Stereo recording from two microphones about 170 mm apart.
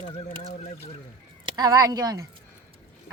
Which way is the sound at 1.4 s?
25° right (ahead or behind).